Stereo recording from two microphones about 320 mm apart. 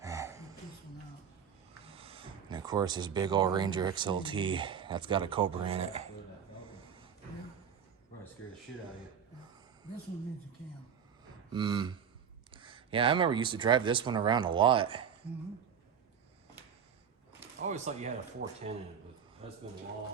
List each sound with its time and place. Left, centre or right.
0.0 s a sound: centre
1.8 s speech: centre
11.5 s speech: centre
17.6 s speech: right